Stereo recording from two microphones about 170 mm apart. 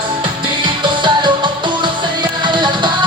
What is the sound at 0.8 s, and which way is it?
Music, 25° right (ahead or behind).